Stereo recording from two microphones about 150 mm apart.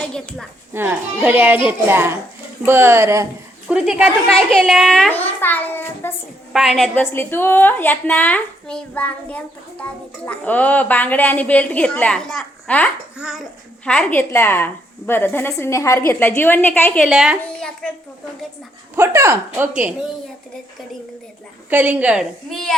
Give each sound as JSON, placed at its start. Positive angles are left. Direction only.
{"t": 0.0, "sound": "a child's voice", "side_deg": 5}
{"t": 0.7, "sound": "a child's voice", "side_deg": -15}
{"t": 3.7, "sound": "a child's voice", "side_deg": -5}
{"t": 4.3, "sound": "a child's voice", "side_deg": 5}
{"t": 6.5, "sound": "a child's voice", "side_deg": 0}
{"t": 6.9, "sound": "a woman's voice", "side_deg": 15}
{"t": 13.1, "sound": "a child's voice", "side_deg": -5}
{"t": 13.8, "sound": "a woman's voice", "side_deg": 5}
{"t": 17.0, "sound": "a child's voice", "side_deg": -5}
{"t": 18.9, "sound": "a child's voice", "side_deg": -15}
{"t": 21.7, "sound": "a child's voice", "side_deg": -10}